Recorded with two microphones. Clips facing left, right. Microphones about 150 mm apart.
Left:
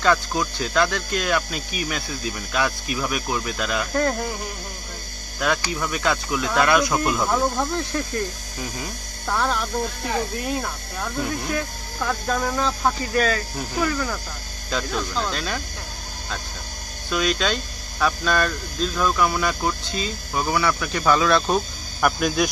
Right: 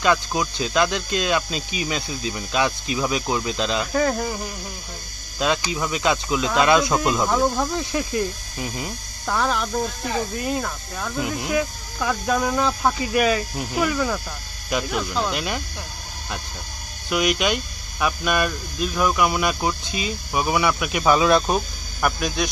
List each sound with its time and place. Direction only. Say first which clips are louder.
0.0 s speech: even; 15° right (ahead or behind)
3.9 s speech: even; centre (ahead or behind)
5.4 s speech: right 1 dB; 20° right (ahead or behind)
7.2 s speech: right 1 dB; 5° right (ahead or behind)
11.1 s speech: right 3 dB; 10° right (ahead or behind)
17.1 s speech: right 1 dB; 15° right (ahead or behind)
22.2 s speech: left 3 dB; centre (ahead or behind)